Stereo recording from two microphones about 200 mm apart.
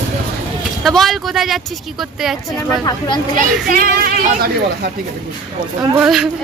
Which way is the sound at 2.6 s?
15° left (ahead or behind).